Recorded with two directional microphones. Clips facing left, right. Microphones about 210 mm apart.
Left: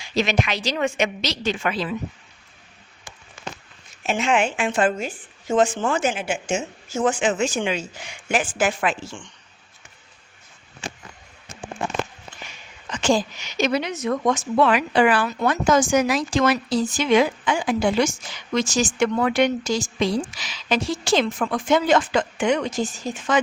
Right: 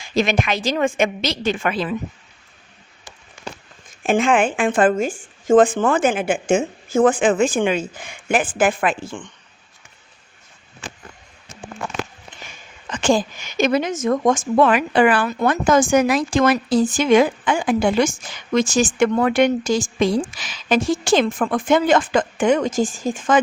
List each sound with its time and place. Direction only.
0.0 s speech: 50° right (ahead or behind)
4.0 s speech: 50° right (ahead or behind)
12.3 s a sound: 20° right (ahead or behind)
12.9 s speech: 55° right (ahead or behind)